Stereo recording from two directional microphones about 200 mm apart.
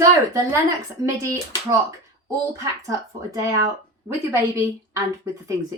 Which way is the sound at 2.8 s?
15° right (ahead or behind).